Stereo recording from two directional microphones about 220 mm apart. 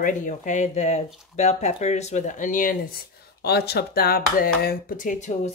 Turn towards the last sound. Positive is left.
turn(degrees=35)  # may be behind; listen again after turning